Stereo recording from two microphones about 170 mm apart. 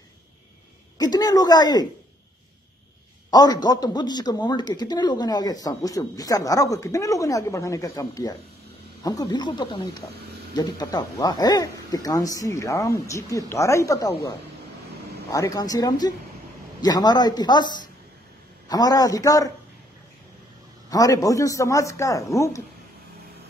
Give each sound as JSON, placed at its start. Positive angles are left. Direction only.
{"t": 0.9, "sound": "speech", "side_deg": 25}
{"t": 3.3, "sound": "speech", "side_deg": 25}
{"t": 15.3, "sound": "speech", "side_deg": 20}
{"t": 18.7, "sound": "speech", "side_deg": 20}
{"t": 20.9, "sound": "speech", "side_deg": 20}